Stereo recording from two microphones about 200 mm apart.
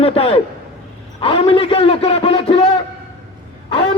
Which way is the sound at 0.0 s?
30° left (ahead or behind).